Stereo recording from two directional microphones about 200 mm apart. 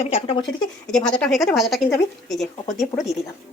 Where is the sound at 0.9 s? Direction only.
5° left (ahead or behind).